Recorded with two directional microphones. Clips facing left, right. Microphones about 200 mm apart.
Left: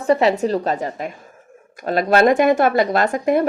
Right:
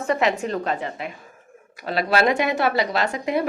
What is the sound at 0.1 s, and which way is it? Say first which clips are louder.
A woman's voice: left 6 dB; 35° left (ahead or behind).